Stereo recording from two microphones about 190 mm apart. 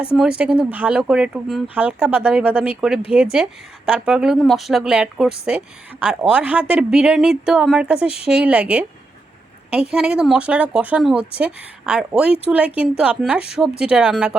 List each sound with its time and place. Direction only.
0.2 s speech: 5° right (ahead or behind)
8.0 s speech: 30° left (ahead or behind)
8.3 s speech: 5° right (ahead or behind)
9.9 s speech: 5° right (ahead or behind)